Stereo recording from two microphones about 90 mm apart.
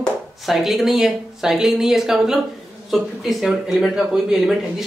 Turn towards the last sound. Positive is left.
turn(degrees=0)  # may be behind; listen again after turning